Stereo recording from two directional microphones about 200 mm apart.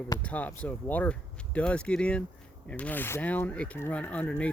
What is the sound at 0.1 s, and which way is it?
Speech, 10° left (ahead or behind).